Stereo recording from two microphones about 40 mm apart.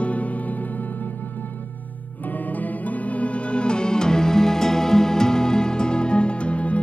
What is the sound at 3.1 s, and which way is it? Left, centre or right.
Music, left.